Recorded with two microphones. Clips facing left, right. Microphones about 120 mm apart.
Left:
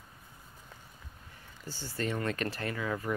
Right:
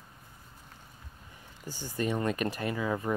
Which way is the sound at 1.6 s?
15° right (ahead or behind).